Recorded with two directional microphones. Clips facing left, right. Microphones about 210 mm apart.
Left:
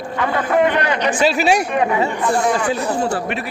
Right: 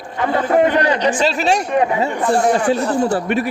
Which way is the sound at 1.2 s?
10° left (ahead or behind).